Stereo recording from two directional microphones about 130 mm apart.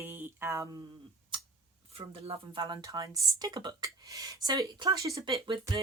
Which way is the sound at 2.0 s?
45° right (ahead or behind).